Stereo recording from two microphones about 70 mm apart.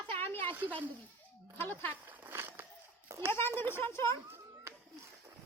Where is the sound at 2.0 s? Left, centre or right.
Right.